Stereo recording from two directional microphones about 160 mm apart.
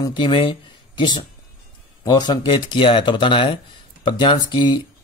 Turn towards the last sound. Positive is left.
turn(degrees=30)  # may be behind; listen again after turning